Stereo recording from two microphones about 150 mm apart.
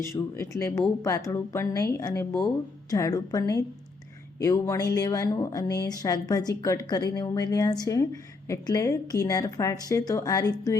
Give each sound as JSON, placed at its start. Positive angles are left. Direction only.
{"t": 0.0, "sound": "a woman's voice", "side_deg": 20}